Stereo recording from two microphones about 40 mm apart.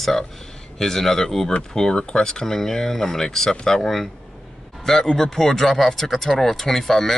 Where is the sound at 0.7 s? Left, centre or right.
Centre.